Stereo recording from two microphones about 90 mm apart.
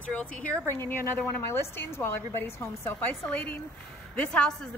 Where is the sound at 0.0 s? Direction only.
15° left (ahead or behind).